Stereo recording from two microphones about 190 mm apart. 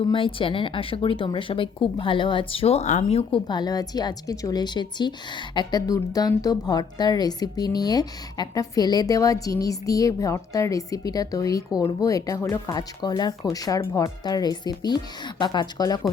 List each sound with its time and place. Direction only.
0.0 s a woman's voice: 30° left (ahead or behind)
3.4 s a woman's voice: 20° left (ahead or behind)